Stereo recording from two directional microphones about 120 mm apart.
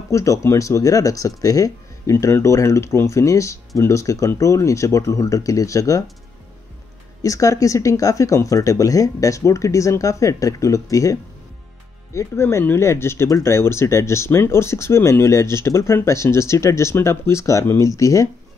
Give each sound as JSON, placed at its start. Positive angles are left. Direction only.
{"t": 0.1, "sound": "speech", "side_deg": 25}
{"t": 7.2, "sound": "speech", "side_deg": 25}